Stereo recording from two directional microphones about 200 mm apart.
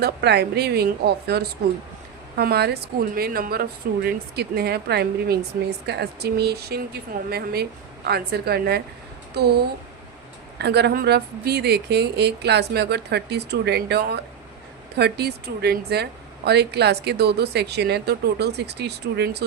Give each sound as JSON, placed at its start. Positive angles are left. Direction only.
{"t": 0.0, "sound": "a woman's voice", "side_deg": -55}
{"t": 10.6, "sound": "a woman's voice", "side_deg": -55}